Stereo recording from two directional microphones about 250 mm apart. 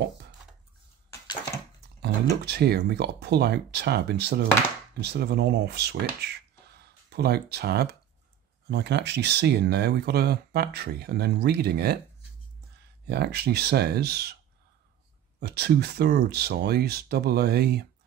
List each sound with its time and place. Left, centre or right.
2.4 s speech: right
13.0 s speech: right
15.4 s speech: right